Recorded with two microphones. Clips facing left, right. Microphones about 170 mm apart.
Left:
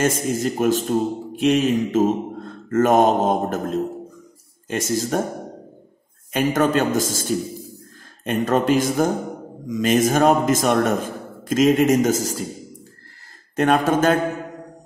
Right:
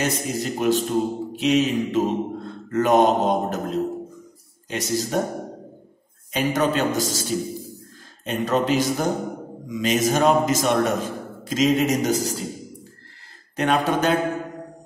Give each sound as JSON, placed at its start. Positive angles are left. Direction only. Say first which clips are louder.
{"t": 0.0, "sound": "a man's voice", "louder": "left 4 dB", "side_deg": 45}
{"t": 6.3, "sound": "a man's voice", "louder": "left 3 dB", "side_deg": 50}
{"t": 13.6, "sound": "a man's voice", "louder": "left 3 dB", "side_deg": 45}